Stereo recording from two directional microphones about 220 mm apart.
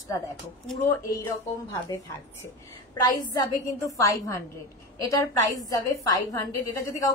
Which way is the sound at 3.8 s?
15° left (ahead or behind).